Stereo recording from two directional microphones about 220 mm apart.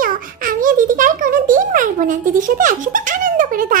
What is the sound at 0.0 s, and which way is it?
Music, 40° right (ahead or behind).